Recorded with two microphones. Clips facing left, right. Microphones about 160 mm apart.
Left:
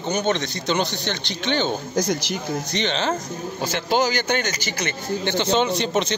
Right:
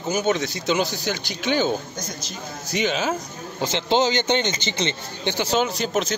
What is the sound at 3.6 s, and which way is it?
A man's voice, 20° right (ahead or behind).